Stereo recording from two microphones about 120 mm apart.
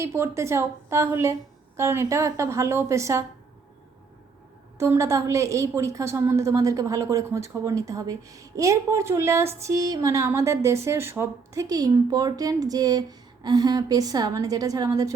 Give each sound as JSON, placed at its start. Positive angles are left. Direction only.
{"t": 0.0, "sound": "a woman's voice", "side_deg": -20}
{"t": 4.8, "sound": "a woman's voice", "side_deg": -25}